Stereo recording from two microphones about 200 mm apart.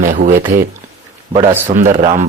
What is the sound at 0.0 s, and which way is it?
Speech, 40° right (ahead or behind).